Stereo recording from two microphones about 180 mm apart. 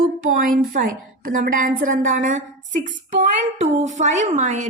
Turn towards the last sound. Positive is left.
turn(degrees=-40)  # may be behind; listen again after turning